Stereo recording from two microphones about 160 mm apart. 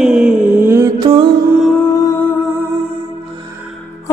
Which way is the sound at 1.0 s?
30° right (ahead or behind).